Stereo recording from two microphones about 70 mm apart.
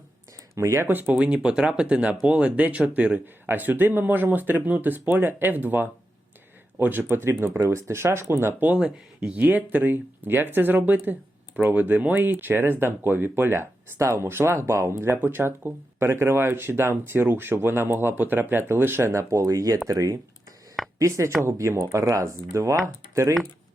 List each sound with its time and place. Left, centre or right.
0.5 s speech: right
0.9 s speech: right
1.2 s speech: centre; by 8.7 s right
8.7 s speech: centre; by 19.2 s right
19.3 s speech: right
21.4 s speech: right
22.1 s speech: right